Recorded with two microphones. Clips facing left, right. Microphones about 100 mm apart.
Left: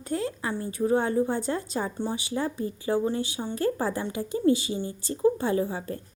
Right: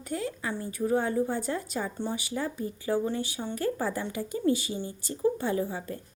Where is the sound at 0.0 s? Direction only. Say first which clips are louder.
Left 3 dB; 30° left (ahead or behind).